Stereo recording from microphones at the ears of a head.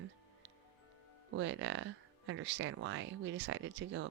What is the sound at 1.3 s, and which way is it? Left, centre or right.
Speech, right.